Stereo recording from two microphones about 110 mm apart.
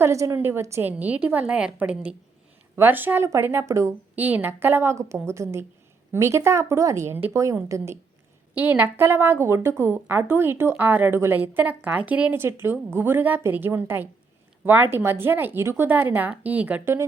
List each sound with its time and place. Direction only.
0.0 s a woman's voice: 25° right (ahead or behind)
4.1 s a woman's voice: 15° right (ahead or behind)
8.5 s a woman's voice: 15° right (ahead or behind)